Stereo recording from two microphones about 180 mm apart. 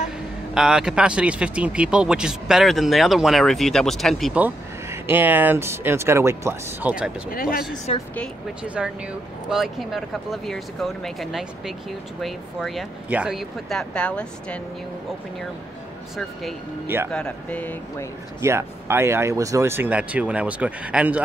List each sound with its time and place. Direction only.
0.6 s speech: 5° right (ahead or behind)
7.2 s speech: 55° left (ahead or behind)
7.9 s a woman's voice: 35° left (ahead or behind)
8.6 s speech: 5° right (ahead or behind)
16.8 s speech: 10° right (ahead or behind)
17.1 s speech: 5° left (ahead or behind)
18.4 s speech: 15° right (ahead or behind)